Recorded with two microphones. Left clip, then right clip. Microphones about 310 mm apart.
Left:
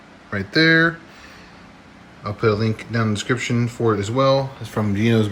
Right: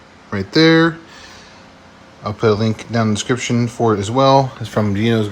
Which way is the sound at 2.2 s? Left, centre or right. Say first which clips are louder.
Right 4 dB; centre.